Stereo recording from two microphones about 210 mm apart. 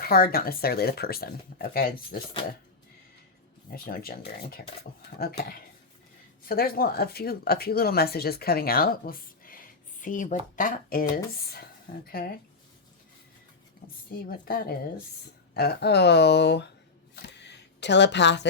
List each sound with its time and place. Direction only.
0.1 s speech: 45° left (ahead or behind)
3.7 s speech: 45° left (ahead or behind)
12.0 s speech: 45° left (ahead or behind)
14.1 s speech: 45° left (ahead or behind)
17.4 s a sound: 55° left (ahead or behind)